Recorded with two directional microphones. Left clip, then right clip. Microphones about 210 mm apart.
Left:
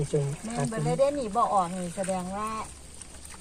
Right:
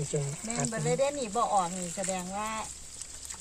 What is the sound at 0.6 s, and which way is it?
Speech, 10° right (ahead or behind).